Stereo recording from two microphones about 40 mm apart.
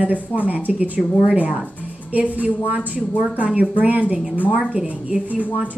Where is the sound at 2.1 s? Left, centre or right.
Right.